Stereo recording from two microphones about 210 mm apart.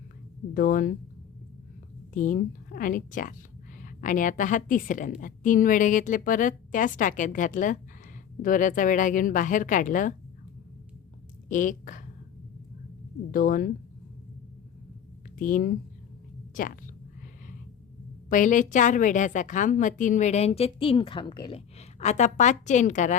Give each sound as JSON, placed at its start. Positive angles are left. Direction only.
{"t": 0.5, "sound": "a woman's voice", "side_deg": 40}
{"t": 2.1, "sound": "a woman's voice", "side_deg": 40}
{"t": 11.4, "sound": "speech", "side_deg": 40}
{"t": 13.3, "sound": "a woman's voice", "side_deg": 40}
{"t": 15.4, "sound": "a woman's voice", "side_deg": 40}
{"t": 18.3, "sound": "a woman's voice", "side_deg": 40}